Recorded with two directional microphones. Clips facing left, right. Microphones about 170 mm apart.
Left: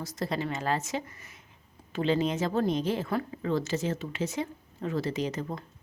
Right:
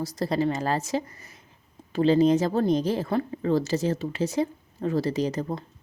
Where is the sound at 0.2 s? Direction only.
35° right (ahead or behind).